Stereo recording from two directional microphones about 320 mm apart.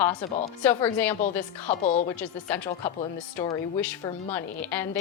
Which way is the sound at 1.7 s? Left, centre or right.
Left.